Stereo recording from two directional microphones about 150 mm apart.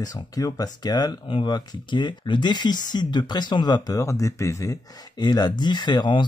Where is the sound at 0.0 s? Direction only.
25° left (ahead or behind).